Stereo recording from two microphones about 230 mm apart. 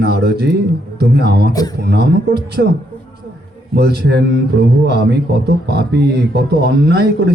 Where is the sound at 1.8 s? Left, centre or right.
Right.